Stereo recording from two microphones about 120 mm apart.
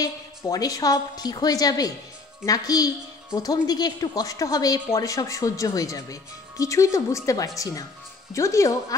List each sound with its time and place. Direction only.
0.0 s a woman's voice: 30° left (ahead or behind)